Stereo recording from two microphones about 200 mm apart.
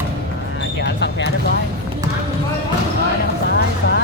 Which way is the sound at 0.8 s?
60° left (ahead or behind).